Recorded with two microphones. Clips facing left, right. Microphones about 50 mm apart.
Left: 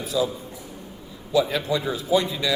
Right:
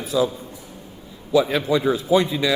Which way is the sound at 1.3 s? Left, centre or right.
Right.